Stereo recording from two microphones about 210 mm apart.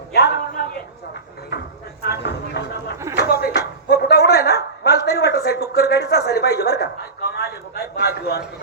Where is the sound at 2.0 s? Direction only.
50° left (ahead or behind).